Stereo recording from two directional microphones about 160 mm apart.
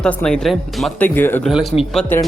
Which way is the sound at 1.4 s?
Centre (ahead or behind).